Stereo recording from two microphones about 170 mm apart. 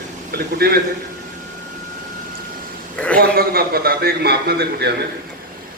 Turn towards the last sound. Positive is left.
turn(degrees=-70)  # may be behind; listen again after turning